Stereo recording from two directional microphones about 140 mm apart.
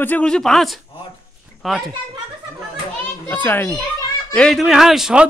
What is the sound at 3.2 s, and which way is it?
Speech, 15° left (ahead or behind).